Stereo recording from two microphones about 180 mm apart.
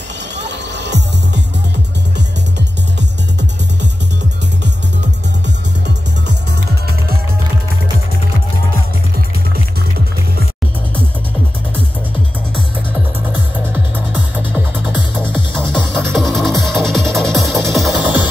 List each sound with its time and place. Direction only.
0.5 s music: 75° right (ahead or behind)
15.3 s music: 5° left (ahead or behind)